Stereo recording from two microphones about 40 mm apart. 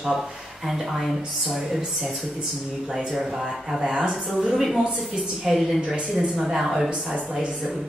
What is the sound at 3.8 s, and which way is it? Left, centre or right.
Speech, right.